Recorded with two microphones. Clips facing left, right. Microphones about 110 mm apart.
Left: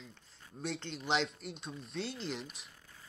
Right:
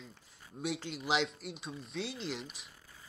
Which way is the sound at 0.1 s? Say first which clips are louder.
Right 2 dB; 5° right (ahead or behind).